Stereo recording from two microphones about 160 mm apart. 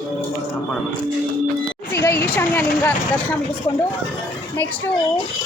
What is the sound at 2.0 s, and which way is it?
Speech, 15° left (ahead or behind).